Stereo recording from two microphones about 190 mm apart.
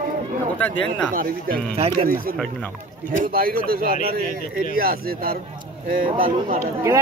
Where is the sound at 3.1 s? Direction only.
50° right (ahead or behind).